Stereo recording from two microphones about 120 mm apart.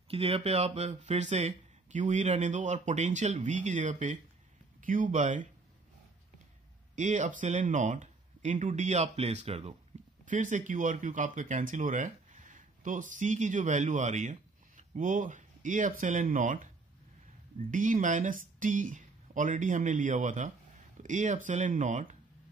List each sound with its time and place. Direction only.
0.1 s speech: 50° right (ahead or behind); by 5.5 s 90° right
7.0 s speech: 90° right; by 9.8 s 60° right (ahead or behind)
10.2 s speech: 90° right
17.6 s speech: 90° right